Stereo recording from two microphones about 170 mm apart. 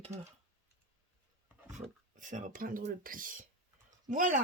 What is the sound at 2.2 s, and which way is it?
Speech, 50° right (ahead or behind).